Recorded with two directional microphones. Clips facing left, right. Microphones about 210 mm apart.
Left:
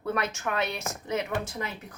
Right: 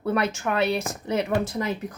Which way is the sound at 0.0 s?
35° right (ahead or behind).